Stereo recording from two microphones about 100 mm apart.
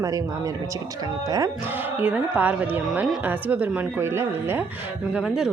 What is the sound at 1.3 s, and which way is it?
Speech, 35° right (ahead or behind).